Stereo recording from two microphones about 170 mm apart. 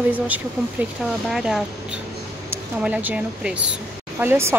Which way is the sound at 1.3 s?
5° right (ahead or behind).